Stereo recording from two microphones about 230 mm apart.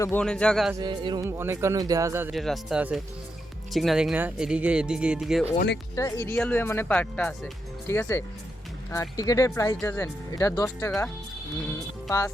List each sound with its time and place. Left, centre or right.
0.0 s speech: centre
0.7 s speech: centre
2.3 s speech: centre
5.5 s speech: left
6.0 s speech: centre